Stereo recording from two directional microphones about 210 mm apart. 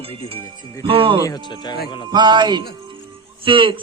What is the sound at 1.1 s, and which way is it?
Speech, 15° left (ahead or behind).